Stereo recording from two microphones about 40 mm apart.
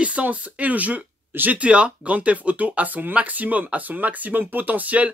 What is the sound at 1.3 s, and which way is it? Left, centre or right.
Speech, right.